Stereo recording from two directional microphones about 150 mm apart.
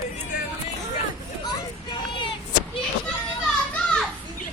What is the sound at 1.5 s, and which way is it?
Children playing, 30° left (ahead or behind).